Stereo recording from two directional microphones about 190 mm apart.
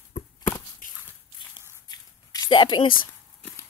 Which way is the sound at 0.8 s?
45° left (ahead or behind).